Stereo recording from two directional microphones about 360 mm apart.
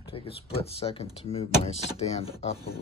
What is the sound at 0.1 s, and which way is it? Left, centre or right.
Speech, centre.